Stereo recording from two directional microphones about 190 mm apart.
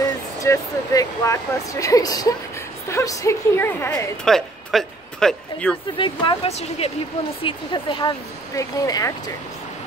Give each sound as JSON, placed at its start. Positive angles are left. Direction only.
{"t": 0.0, "sound": "speech", "side_deg": 15}
{"t": 4.2, "sound": "speech", "side_deg": 0}
{"t": 5.9, "sound": "speech", "side_deg": 25}